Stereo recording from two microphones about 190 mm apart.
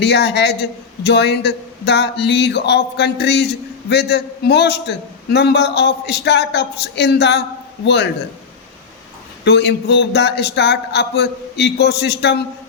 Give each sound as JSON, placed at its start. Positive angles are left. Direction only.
{"t": 0.0, "sound": "a man's voice", "side_deg": 65}
{"t": 9.4, "sound": "a man's voice", "side_deg": 65}